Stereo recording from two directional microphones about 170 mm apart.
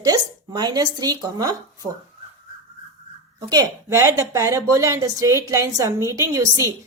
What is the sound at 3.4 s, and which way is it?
A woman's voice, 25° right (ahead or behind).